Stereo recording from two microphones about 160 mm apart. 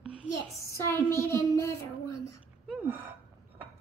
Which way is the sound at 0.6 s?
15° left (ahead or behind).